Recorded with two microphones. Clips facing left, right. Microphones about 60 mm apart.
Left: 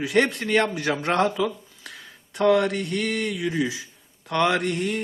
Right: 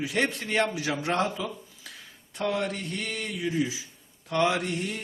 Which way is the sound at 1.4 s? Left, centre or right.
Left.